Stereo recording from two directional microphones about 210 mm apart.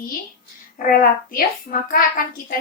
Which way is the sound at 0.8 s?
40° left (ahead or behind).